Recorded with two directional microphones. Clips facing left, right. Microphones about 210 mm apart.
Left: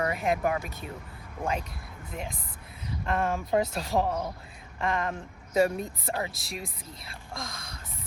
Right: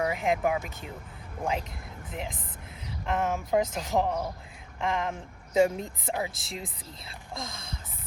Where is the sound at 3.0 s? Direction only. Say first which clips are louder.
Even; 15° right (ahead or behind).